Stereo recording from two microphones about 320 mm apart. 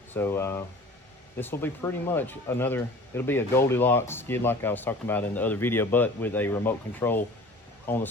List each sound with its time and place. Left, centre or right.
0.1 s speech: centre